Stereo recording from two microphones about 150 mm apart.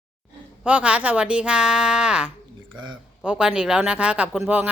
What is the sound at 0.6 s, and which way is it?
A woman's voice, 10° right (ahead or behind).